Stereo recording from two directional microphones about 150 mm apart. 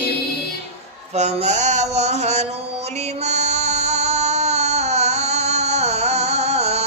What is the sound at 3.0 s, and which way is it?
Music, 45° right (ahead or behind).